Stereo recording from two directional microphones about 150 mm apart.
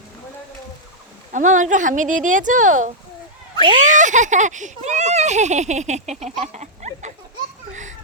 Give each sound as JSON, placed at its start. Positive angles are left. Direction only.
{"t": 1.3, "sound": "a child's voice", "side_deg": -55}
{"t": 6.4, "sound": "a sound", "side_deg": -50}
{"t": 7.7, "sound": "children playing", "side_deg": -55}